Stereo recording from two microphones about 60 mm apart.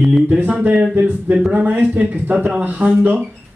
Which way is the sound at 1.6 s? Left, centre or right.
Right.